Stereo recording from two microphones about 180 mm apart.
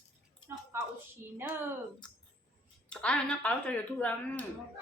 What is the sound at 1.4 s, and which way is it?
Speech, 10° right (ahead or behind).